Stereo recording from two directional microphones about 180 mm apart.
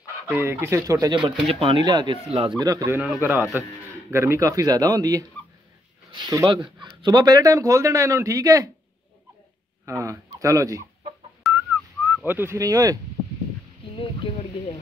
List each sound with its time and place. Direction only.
0.3 s speech: 15° right (ahead or behind)
1.2 s speech: centre (ahead or behind)
1.5 s speech: 30° right (ahead or behind)
9.8 s speech: 15° right (ahead or behind)
11.4 s whistling: centre (ahead or behind)
12.1 s speech: 10° right (ahead or behind)
13.9 s speech: 30° left (ahead or behind)